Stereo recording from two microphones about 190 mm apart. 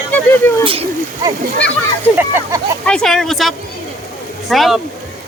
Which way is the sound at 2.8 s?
5° left (ahead or behind).